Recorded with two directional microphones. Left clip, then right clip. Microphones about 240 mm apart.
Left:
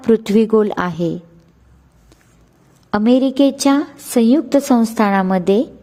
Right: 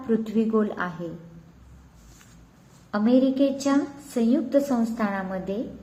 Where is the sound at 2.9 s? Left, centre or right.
Left.